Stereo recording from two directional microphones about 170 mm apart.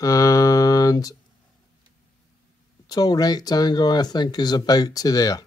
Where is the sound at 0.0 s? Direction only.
20° left (ahead or behind).